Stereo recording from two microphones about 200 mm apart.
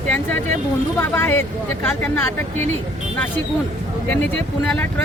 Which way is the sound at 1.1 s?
10° left (ahead or behind).